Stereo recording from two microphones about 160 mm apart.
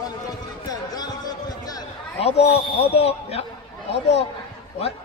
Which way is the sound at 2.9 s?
40° left (ahead or behind).